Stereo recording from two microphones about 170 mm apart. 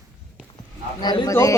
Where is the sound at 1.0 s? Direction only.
20° left (ahead or behind).